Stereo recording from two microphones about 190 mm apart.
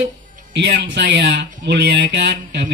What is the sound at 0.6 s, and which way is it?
Speech, 65° right (ahead or behind).